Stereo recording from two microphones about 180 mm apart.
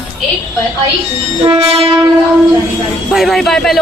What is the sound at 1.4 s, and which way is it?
Train, 30° right (ahead or behind).